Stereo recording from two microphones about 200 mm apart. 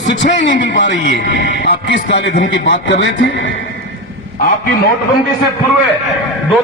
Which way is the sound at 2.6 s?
65° left (ahead or behind).